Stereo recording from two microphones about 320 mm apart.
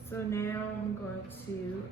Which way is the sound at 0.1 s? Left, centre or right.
Centre.